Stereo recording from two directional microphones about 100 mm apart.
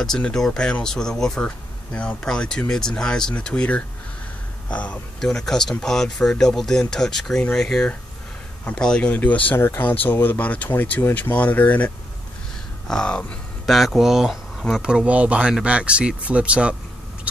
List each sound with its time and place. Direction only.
0.0 s speech: 5° left (ahead or behind)
12.8 s a sound: 5° left (ahead or behind)
13.7 s speech: centre (ahead or behind)